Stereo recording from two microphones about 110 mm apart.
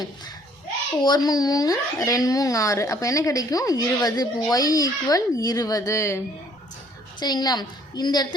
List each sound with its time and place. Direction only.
1.0 s speech: 40° left (ahead or behind)
7.2 s speech: 40° left (ahead or behind)